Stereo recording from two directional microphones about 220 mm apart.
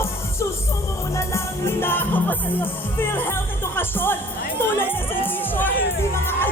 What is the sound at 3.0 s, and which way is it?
Speech, 10° left (ahead or behind).